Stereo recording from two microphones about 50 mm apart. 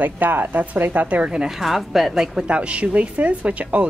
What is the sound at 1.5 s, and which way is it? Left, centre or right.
Speech, centre.